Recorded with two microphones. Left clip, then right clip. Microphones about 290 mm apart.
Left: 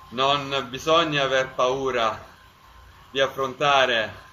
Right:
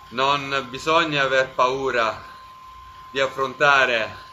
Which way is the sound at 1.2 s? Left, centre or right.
Centre.